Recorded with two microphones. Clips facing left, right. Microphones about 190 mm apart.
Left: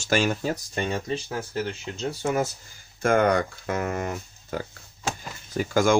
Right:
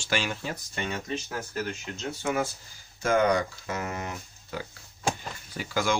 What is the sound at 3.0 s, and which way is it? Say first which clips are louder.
Speech: left 3 dB; 55° left (ahead or behind).